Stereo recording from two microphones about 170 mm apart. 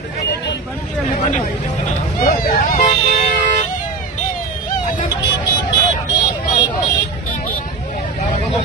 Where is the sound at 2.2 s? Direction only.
60° left (ahead or behind).